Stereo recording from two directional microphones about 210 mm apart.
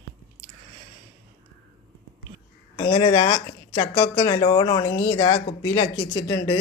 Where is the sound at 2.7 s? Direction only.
25° left (ahead or behind).